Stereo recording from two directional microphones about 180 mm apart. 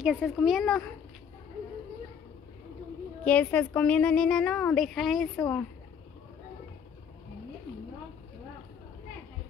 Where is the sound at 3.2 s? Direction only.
5° left (ahead or behind).